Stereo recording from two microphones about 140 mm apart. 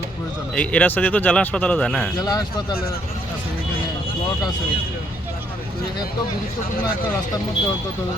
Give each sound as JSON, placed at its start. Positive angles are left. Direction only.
{"t": 0.5, "sound": "a man's voice", "side_deg": 10}
{"t": 2.1, "sound": "a man's voice", "side_deg": 30}